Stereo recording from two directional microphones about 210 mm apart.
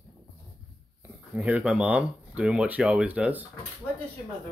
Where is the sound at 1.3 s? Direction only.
5° right (ahead or behind).